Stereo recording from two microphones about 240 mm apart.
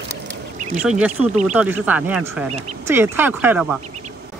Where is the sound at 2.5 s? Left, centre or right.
Right.